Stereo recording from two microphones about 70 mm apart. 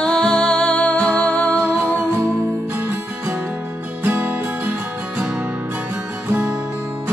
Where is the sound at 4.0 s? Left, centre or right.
Right.